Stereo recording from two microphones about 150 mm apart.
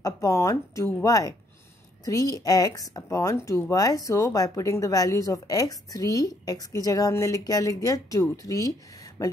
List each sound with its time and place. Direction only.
0.0 s speech: 20° left (ahead or behind)